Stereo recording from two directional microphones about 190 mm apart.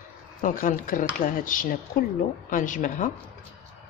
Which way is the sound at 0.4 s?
45° left (ahead or behind).